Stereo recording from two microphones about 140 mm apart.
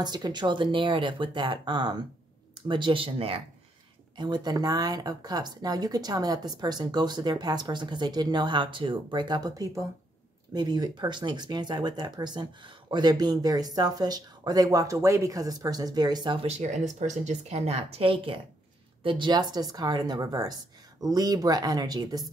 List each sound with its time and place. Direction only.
0.0 s speech: 30° right (ahead or behind)
4.2 s speech: 30° right (ahead or behind)
16.4 s speech: 55° right (ahead or behind); by 22.3 s 30° right (ahead or behind)